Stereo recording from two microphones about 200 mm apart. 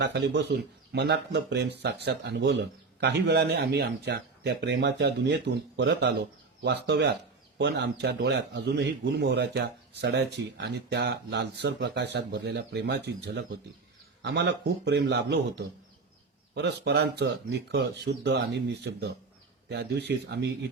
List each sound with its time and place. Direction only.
0.0 s speech: 55° right (ahead or behind)